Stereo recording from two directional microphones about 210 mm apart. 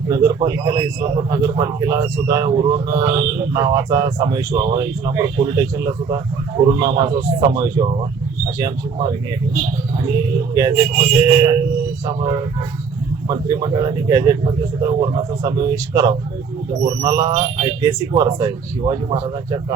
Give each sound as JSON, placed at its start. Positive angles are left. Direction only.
{"t": 0.1, "sound": "a man's voice", "side_deg": -15}
{"t": 10.5, "sound": "speech", "side_deg": -20}
{"t": 13.2, "sound": "a man's voice", "side_deg": -15}
{"t": 17.3, "sound": "a man's voice", "side_deg": -30}
{"t": 17.8, "sound": "a man's voice", "side_deg": -20}